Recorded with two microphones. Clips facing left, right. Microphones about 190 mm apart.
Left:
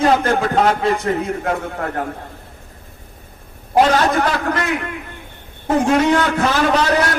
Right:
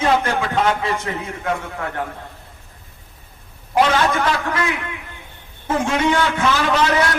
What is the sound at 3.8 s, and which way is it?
Speech, 40° left (ahead or behind).